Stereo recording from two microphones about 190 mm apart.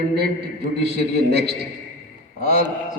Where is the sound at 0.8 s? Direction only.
55° right (ahead or behind).